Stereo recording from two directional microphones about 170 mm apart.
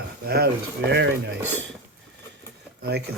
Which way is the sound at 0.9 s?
90° right.